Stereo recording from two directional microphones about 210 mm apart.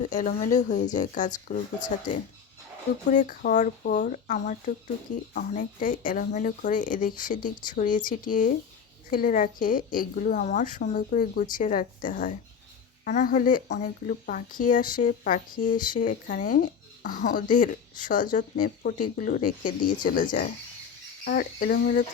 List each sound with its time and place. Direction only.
0.0 s speech: 35° left (ahead or behind)